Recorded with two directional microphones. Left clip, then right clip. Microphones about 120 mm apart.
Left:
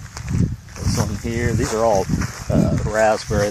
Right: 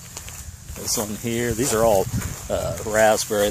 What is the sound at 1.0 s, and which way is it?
Speech, 10° right (ahead or behind).